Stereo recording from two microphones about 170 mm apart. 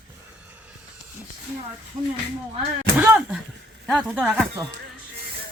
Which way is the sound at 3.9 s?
Centre (ahead or behind).